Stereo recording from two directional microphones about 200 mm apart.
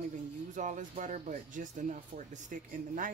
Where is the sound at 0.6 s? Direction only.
40° right (ahead or behind).